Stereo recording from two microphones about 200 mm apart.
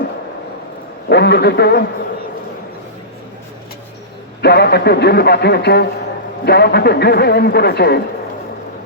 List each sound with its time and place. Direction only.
1.1 s a man's voice: 55° left (ahead or behind)
4.4 s a man's voice: 55° left (ahead or behind)